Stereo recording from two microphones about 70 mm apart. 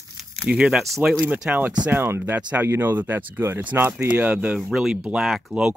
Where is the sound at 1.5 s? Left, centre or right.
Right.